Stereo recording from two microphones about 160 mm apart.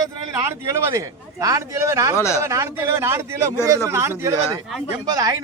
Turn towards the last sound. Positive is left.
turn(degrees=-20)  # may be behind; listen again after turning